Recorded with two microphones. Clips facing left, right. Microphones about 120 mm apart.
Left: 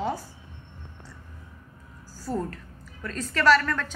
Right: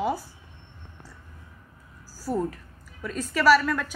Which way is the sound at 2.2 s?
10° right (ahead or behind).